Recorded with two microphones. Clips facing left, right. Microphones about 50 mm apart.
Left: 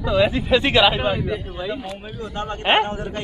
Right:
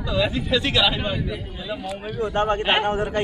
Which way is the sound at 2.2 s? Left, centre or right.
Right.